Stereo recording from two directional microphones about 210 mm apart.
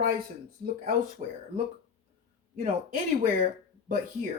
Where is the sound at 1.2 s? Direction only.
35° right (ahead or behind).